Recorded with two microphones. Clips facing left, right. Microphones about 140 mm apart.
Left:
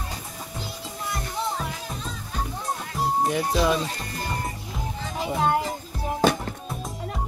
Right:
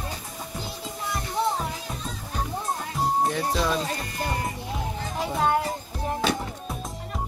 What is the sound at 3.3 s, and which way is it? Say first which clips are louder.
Speech: left 3 dB; 10° left (ahead or behind).